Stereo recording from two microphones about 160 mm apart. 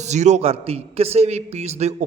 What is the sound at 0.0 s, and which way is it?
A man's voice, 45° right (ahead or behind).